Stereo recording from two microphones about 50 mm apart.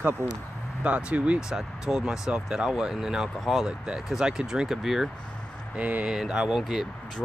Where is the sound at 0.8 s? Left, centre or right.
Right.